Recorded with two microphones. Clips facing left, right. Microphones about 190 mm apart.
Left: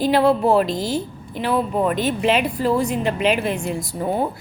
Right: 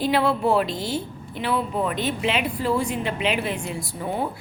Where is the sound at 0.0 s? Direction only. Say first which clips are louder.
Left 5 dB; 40° left (ahead or behind).